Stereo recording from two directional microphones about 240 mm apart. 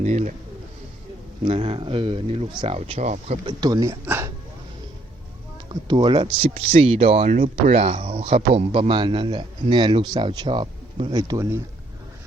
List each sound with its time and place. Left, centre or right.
0.0 s speech: right
1.5 s speech: right
3.4 s speech: centre
5.9 s speech: centre